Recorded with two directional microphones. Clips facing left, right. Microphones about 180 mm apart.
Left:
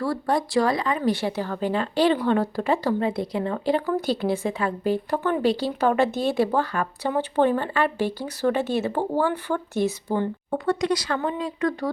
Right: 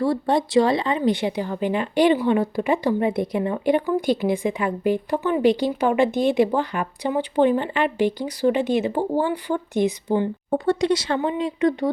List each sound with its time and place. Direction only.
0.0 s speech: 25° right (ahead or behind)
10.5 s speech: 25° right (ahead or behind)